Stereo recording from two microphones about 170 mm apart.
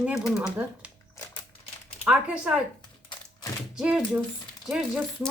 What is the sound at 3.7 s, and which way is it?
Speech, 5° right (ahead or behind).